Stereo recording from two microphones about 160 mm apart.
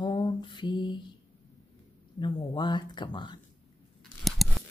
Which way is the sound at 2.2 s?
30° left (ahead or behind).